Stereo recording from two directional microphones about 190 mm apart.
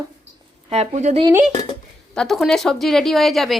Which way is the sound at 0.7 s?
35° right (ahead or behind).